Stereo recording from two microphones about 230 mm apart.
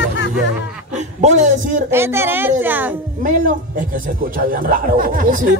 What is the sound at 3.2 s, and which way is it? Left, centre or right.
Speech, right.